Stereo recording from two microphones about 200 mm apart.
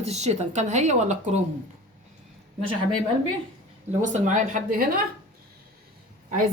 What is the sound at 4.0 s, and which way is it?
Speech, 35° right (ahead or behind).